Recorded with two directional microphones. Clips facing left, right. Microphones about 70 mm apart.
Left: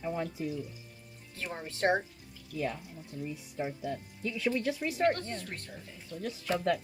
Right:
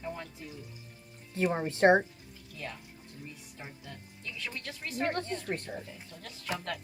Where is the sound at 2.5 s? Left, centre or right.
Centre.